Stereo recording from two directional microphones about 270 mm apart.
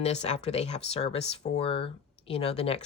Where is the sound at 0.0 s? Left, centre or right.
Left.